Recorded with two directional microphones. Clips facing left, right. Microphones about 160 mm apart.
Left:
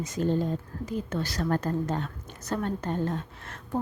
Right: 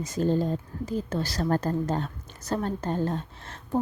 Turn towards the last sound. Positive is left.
turn(degrees=-30)  # may be behind; listen again after turning